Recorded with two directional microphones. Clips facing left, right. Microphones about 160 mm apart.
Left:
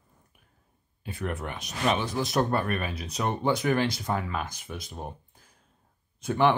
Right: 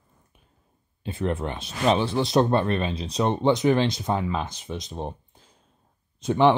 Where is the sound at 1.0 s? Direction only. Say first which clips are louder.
Right 6 dB; 25° right (ahead or behind).